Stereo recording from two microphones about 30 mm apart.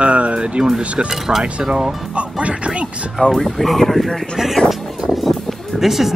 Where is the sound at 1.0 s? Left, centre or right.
Centre.